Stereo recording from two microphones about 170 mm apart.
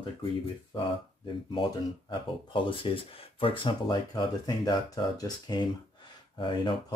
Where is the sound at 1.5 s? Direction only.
30° left (ahead or behind).